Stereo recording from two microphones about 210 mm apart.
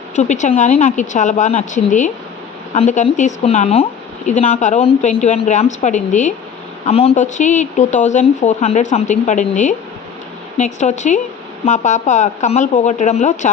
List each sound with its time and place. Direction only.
0.2 s speech: 35° left (ahead or behind)